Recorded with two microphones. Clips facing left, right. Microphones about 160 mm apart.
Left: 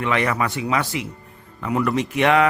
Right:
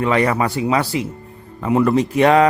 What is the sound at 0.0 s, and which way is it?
Speech, 35° right (ahead or behind).